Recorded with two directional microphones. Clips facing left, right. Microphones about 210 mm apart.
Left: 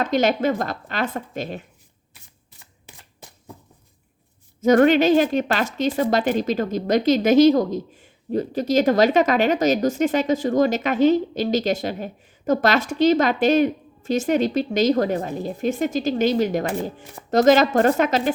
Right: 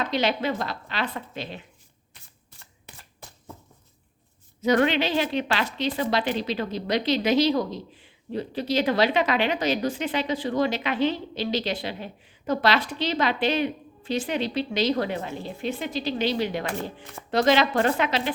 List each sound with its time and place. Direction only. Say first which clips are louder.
0.0 s a woman's voice: left 6 dB; 45° left (ahead or behind)
4.6 s a woman's voice: left 7 dB; 45° left (ahead or behind)